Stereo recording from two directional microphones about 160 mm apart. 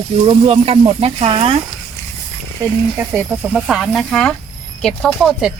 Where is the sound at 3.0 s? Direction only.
10° right (ahead or behind).